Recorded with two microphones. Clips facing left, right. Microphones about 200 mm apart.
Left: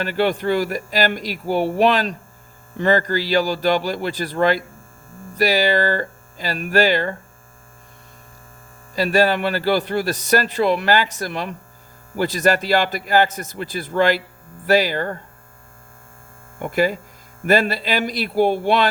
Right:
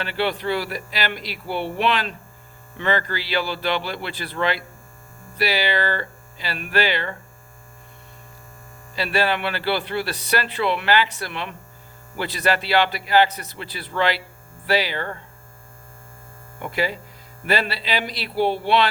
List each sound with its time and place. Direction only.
0.0 s speech: 45° left (ahead or behind)
9.0 s speech: 40° left (ahead or behind)
16.6 s speech: 50° left (ahead or behind)